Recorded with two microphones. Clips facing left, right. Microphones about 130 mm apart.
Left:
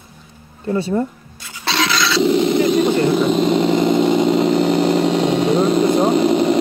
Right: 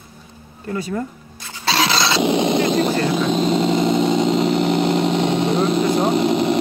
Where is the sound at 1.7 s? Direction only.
35° right (ahead or behind).